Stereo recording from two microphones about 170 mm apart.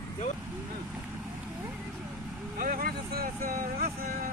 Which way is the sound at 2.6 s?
55° right (ahead or behind).